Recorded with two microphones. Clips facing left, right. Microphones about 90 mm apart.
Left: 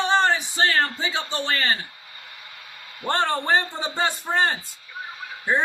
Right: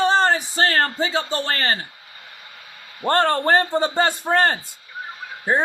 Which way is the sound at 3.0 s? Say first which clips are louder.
Right 4 dB; 50° right (ahead or behind).